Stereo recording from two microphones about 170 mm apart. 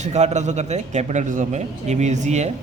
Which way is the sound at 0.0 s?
40° right (ahead or behind).